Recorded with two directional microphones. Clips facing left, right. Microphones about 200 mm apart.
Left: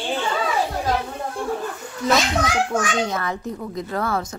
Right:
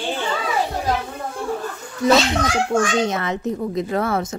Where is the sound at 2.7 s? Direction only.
20° right (ahead or behind).